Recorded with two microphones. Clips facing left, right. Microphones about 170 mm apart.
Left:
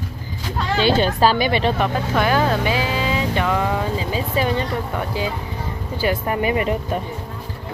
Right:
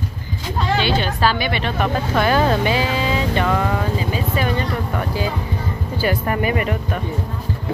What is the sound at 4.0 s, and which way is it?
Vehicle, 25° left (ahead or behind).